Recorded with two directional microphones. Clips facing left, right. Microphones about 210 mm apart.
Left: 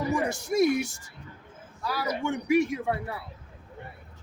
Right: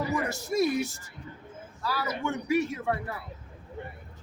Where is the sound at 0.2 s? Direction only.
15° left (ahead or behind).